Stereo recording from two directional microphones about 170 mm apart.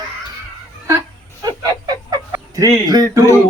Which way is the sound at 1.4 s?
25° right (ahead or behind).